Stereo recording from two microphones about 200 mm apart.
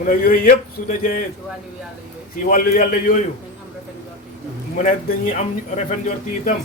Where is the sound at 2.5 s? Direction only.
45° left (ahead or behind).